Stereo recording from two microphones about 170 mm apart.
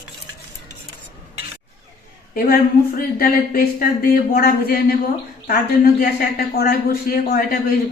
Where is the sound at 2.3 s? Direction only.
60° left (ahead or behind).